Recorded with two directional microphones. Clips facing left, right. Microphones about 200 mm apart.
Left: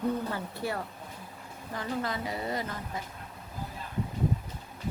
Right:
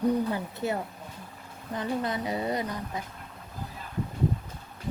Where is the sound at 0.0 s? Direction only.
15° right (ahead or behind).